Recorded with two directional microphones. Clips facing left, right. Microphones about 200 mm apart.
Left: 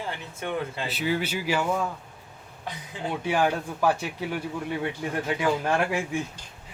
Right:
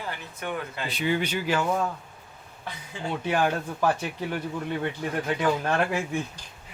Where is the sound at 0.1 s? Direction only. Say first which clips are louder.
Left 1 dB; 25° left (ahead or behind).